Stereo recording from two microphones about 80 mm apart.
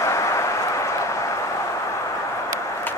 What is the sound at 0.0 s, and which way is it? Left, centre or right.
Vehicle, left.